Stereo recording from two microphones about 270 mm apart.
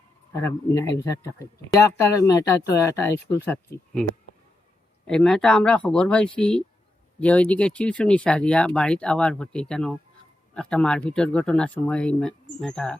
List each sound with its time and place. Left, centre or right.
0.3 s speech: centre
5.0 s speech: centre